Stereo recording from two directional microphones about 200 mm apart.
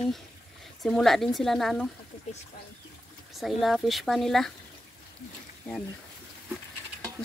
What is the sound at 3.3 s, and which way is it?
A woman's voice, centre (ahead or behind).